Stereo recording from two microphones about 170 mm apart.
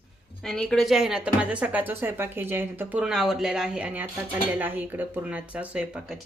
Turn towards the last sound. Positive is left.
turn(degrees=-5)  # may be behind; listen again after turning